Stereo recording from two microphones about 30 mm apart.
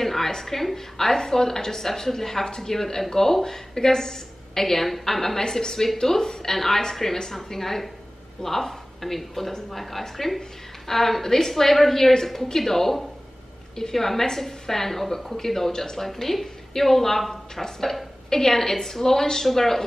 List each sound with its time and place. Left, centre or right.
0.0 s a sound: centre
0.3 s a woman's voice: centre
5.4 s a woman's voice: left